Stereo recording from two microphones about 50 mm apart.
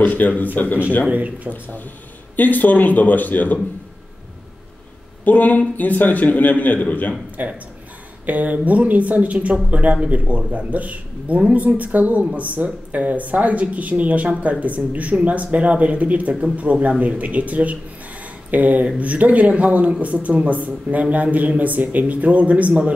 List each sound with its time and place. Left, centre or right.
0.0 s a man's voice: left
1.1 s speech: right
2.3 s a man's voice: left
5.2 s a man's voice: left
7.4 s speech: right